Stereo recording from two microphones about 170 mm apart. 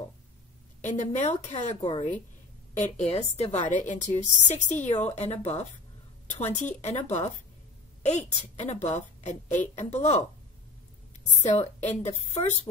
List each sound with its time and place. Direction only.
0.8 s a woman's voice: 45° left (ahead or behind)
11.8 s a woman's voice: 40° left (ahead or behind)